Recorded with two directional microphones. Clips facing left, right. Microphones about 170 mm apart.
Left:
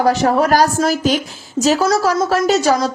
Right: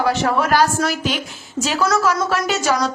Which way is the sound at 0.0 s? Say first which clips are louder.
Left 4 dB; 40° left (ahead or behind).